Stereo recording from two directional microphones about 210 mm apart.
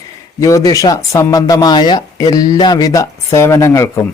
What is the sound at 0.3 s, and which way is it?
Speech, 15° left (ahead or behind).